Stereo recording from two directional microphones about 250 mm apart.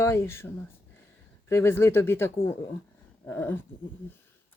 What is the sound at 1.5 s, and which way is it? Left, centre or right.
Speech, centre.